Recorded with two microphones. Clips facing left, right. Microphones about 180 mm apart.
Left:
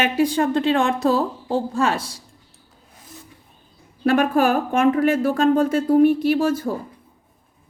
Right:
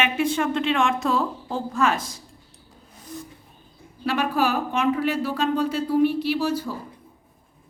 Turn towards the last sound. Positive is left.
turn(degrees=50)  # may be behind; listen again after turning